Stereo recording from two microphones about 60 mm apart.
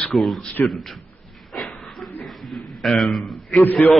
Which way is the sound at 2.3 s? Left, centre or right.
Centre.